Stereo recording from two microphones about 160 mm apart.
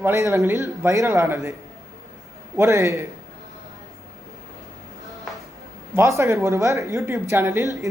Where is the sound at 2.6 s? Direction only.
15° right (ahead or behind).